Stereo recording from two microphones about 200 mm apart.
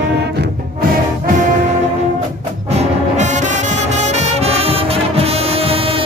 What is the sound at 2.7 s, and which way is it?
Brass instrument, 35° right (ahead or behind).